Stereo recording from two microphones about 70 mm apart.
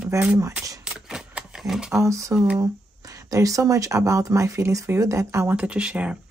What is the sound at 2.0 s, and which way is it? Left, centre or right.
Speech, right.